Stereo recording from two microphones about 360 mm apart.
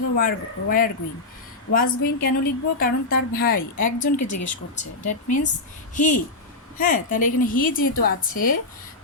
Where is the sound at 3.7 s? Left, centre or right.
Left.